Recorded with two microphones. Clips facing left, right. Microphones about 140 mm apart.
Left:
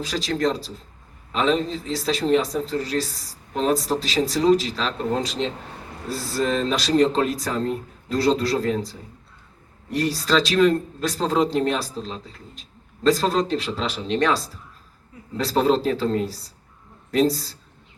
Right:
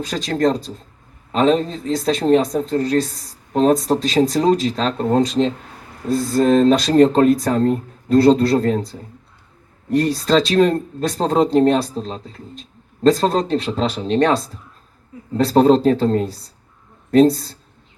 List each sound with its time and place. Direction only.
0.0 s speech: 50° right (ahead or behind)